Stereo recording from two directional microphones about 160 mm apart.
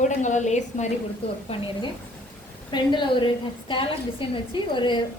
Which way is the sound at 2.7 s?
30° left (ahead or behind).